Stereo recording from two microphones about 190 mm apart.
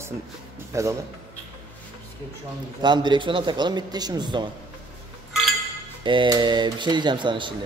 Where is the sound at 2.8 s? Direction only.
25° right (ahead or behind).